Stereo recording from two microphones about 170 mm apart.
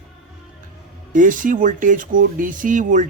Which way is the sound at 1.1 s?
50° right (ahead or behind).